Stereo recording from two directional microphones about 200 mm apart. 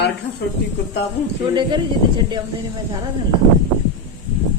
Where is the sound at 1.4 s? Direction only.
25° right (ahead or behind).